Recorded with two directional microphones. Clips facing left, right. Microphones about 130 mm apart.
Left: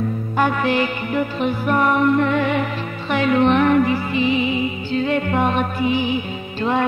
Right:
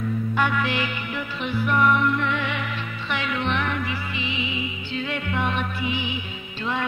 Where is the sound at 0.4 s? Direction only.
40° left (ahead or behind).